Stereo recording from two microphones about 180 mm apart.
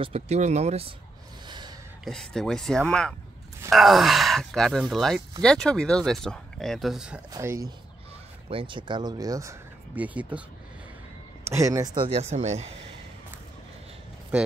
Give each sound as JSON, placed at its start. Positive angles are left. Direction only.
{"t": 0.0, "sound": "speech", "side_deg": -35}
{"t": 2.0, "sound": "speech", "side_deg": 5}
{"t": 7.3, "sound": "speech", "side_deg": -20}
{"t": 8.5, "sound": "speech", "side_deg": -30}
{"t": 11.4, "sound": "speech", "side_deg": -15}